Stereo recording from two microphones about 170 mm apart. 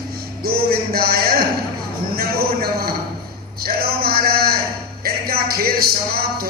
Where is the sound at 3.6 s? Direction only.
65° right (ahead or behind).